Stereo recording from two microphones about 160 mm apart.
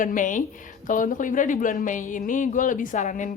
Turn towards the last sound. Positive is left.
turn(degrees=50)  # may be behind; listen again after turning